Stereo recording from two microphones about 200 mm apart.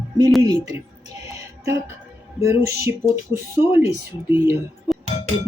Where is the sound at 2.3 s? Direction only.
15° right (ahead or behind).